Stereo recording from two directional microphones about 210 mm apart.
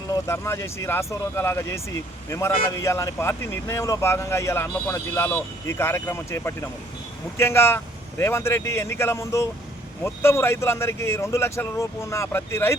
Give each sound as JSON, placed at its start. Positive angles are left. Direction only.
{"t": 0.1, "sound": "speech", "side_deg": 15}
{"t": 2.8, "sound": "speech", "side_deg": 15}